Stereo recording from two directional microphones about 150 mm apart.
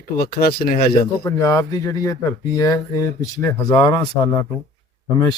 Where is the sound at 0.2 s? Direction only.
85° left.